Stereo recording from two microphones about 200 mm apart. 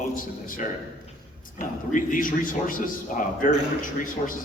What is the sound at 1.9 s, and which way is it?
A man's voice, 45° left (ahead or behind).